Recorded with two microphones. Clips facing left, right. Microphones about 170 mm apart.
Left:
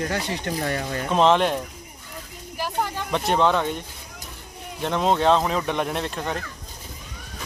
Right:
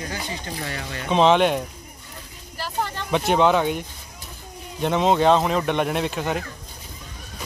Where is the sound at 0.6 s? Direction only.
45° left (ahead or behind).